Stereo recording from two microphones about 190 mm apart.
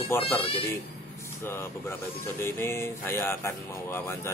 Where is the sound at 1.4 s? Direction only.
15° left (ahead or behind).